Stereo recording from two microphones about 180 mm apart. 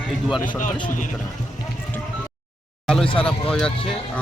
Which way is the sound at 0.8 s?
45° left (ahead or behind).